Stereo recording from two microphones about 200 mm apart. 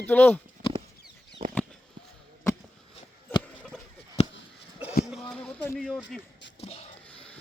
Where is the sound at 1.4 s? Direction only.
30° right (ahead or behind).